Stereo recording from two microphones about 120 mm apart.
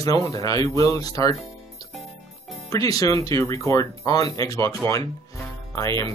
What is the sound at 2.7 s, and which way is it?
Speech, 30° left (ahead or behind).